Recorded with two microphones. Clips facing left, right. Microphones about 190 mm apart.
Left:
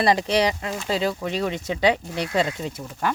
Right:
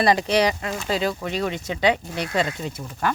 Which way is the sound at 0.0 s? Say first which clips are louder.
Right 1 dB; 30° left (ahead or behind).